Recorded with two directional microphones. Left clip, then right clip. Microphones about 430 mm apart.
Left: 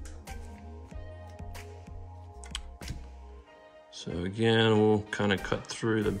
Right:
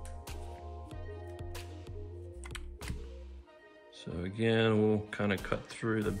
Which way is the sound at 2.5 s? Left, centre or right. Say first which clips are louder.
Left 8 dB; centre.